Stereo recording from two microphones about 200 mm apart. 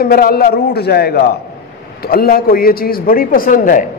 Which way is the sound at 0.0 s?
50° left (ahead or behind).